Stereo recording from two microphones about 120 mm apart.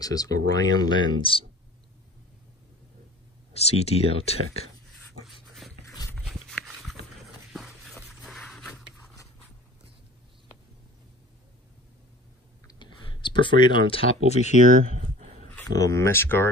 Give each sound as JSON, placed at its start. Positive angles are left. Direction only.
{"t": 0.0, "sound": "speech", "side_deg": 30}
{"t": 3.5, "sound": "speech", "side_deg": 60}
{"t": 6.1, "sound": "horse", "side_deg": 0}
{"t": 7.5, "sound": "a sound", "side_deg": 0}
{"t": 12.6, "sound": "clicking", "side_deg": 40}
{"t": 14.7, "sound": "speech", "side_deg": -90}
{"t": 15.7, "sound": "speech", "side_deg": 25}